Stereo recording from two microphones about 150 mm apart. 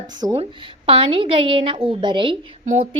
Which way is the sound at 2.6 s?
55° right (ahead or behind).